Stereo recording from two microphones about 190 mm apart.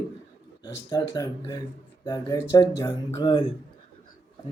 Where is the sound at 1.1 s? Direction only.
20° left (ahead or behind).